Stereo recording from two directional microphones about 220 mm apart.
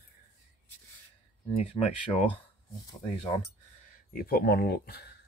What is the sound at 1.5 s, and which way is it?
Speech, 25° left (ahead or behind).